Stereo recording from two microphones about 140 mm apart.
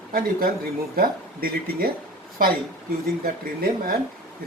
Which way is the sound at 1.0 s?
90° right.